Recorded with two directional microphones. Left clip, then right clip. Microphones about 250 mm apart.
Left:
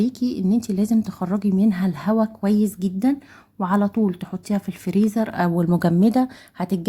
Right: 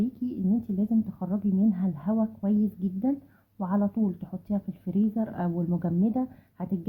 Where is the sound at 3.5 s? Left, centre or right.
Left.